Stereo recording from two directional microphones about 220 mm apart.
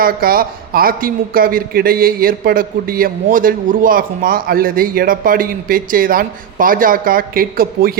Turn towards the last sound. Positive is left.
turn(degrees=-40)  # may be behind; listen again after turning